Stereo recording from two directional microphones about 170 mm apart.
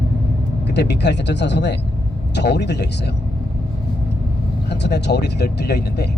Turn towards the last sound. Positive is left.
turn(degrees=75)  # may be behind; listen again after turning